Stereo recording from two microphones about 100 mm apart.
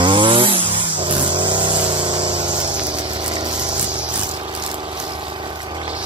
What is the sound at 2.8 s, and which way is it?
Vehicle, 50° right (ahead or behind).